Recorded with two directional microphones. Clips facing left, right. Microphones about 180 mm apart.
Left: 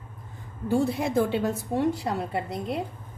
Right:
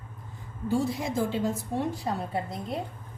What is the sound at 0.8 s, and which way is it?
A woman's voice, 60° left (ahead or behind).